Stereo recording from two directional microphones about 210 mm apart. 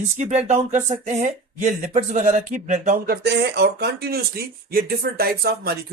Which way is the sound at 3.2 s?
55° right (ahead or behind).